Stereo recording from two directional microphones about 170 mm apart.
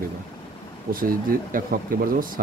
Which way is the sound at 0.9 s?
55° right (ahead or behind).